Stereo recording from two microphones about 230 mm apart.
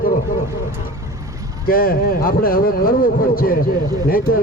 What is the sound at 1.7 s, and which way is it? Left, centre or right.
A man's voice, left.